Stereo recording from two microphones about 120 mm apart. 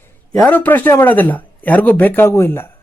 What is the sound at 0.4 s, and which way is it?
Speech, 15° left (ahead or behind).